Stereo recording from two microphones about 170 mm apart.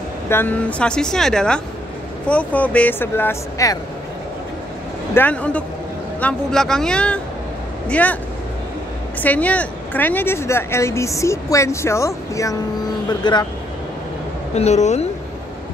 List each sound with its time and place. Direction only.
0.3 s speech: 10° left (ahead or behind)
5.1 s speech: 10° left (ahead or behind)
9.2 s speech: 10° left (ahead or behind); by 13.5 s 25° left (ahead or behind)
14.5 s speech: 40° left (ahead or behind)